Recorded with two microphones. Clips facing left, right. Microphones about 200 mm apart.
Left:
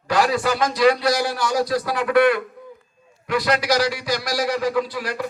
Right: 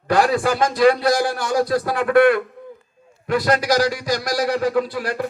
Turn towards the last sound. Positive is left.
turn(degrees=-55)  # may be behind; listen again after turning